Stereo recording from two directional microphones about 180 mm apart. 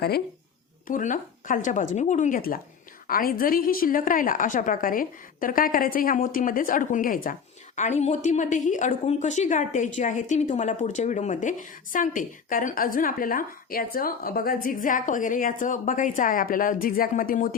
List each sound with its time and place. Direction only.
0.9 s a woman's voice: 45° left (ahead or behind)